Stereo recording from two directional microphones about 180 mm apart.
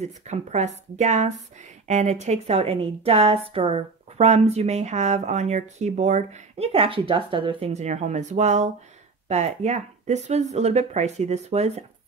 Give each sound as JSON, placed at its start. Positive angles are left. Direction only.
{"t": 0.3, "sound": "a woman's voice", "side_deg": -40}